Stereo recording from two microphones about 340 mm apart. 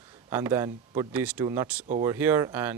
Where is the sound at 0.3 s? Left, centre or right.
Centre.